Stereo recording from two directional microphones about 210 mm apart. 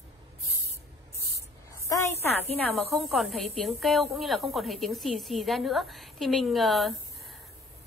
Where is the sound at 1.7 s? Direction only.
15° left (ahead or behind).